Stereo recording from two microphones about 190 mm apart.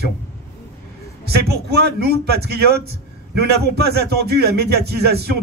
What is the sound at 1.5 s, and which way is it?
A man's voice, 55° right (ahead or behind).